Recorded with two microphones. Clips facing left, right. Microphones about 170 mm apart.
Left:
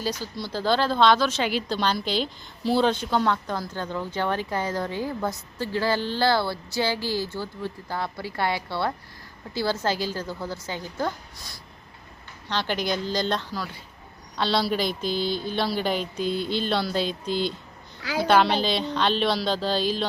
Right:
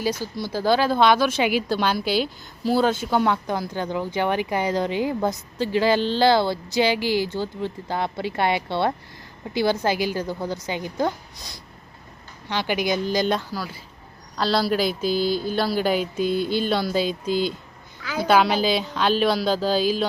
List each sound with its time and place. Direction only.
0.0 s a woman's voice: 10° right (ahead or behind)
16.2 s music: 50° right (ahead or behind)
16.5 s a woman's voice: 5° right (ahead or behind)